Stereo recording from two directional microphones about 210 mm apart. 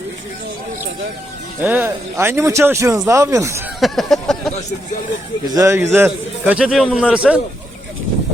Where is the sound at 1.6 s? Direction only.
10° right (ahead or behind).